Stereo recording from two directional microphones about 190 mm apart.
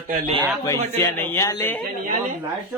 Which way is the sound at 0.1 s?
40° right (ahead or behind).